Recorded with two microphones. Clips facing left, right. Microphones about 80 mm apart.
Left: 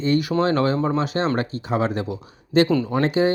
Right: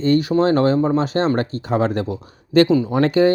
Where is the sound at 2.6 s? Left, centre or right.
Centre.